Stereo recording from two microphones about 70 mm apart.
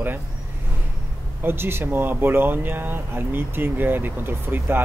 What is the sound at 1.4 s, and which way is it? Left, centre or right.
Speech, right.